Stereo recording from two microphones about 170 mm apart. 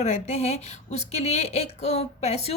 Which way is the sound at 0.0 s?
45° left (ahead or behind).